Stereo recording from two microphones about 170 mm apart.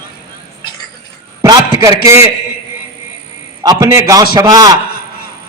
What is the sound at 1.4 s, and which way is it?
Speech, 20° right (ahead or behind).